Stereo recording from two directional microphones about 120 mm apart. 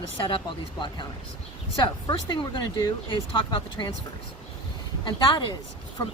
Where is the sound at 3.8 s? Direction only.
40° left (ahead or behind).